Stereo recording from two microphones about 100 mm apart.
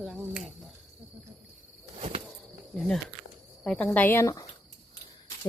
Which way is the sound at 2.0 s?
90° right.